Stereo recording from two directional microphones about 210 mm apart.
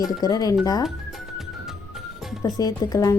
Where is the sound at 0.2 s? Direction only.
20° left (ahead or behind).